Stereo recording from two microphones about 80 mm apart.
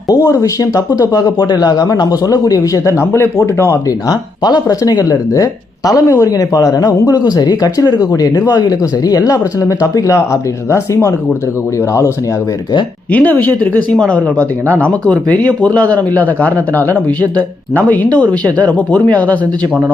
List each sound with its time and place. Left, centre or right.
0.1 s speech: left
3.0 s speech: left
13.1 s speech: left